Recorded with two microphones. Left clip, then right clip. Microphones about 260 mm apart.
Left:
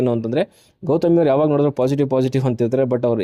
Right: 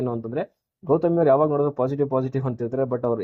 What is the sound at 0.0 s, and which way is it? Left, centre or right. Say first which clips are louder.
Speech: left 8 dB; left.